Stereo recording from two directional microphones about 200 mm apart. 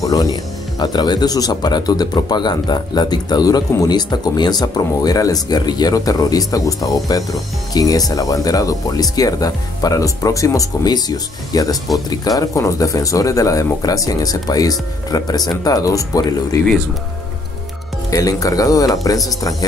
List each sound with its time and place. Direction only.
0.0 s speech: 20° left (ahead or behind)
18.1 s speech: 15° left (ahead or behind)